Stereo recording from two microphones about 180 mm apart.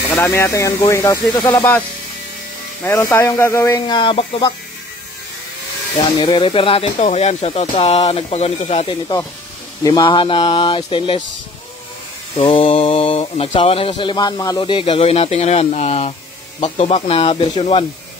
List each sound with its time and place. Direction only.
0.1 s speech: 10° left (ahead or behind)
2.8 s speech: 10° left (ahead or behind)
3.8 s speech: 25° left (ahead or behind)
6.1 s speech: 25° left (ahead or behind)
9.8 s speech: 20° left (ahead or behind)
12.4 s speech: 30° left (ahead or behind)